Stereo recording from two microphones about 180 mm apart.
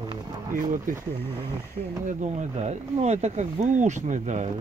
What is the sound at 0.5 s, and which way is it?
Speech, 50° right (ahead or behind).